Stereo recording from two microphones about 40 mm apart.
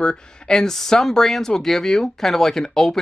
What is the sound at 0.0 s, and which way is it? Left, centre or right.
Speech, centre.